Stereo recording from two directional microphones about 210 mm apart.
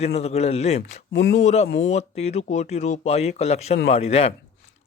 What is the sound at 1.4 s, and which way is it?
A man's voice, 30° left (ahead or behind).